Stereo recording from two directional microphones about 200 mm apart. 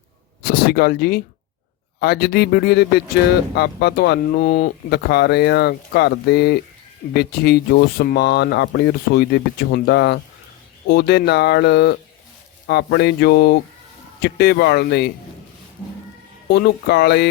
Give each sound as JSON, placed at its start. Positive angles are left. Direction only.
{"t": 0.4, "sound": "speech", "side_deg": 50}
{"t": 16.5, "sound": "speech", "side_deg": 55}